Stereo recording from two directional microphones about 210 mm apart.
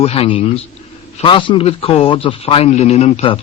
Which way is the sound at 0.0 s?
25° left (ahead or behind).